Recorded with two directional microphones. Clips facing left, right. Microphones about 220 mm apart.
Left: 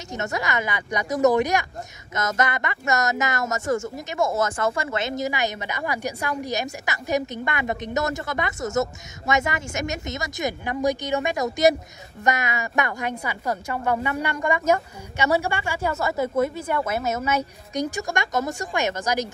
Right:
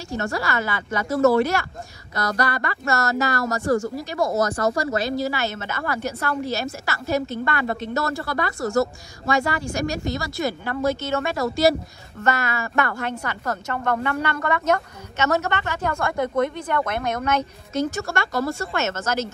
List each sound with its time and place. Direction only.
0.1 s a woman's voice: 20° left (ahead or behind)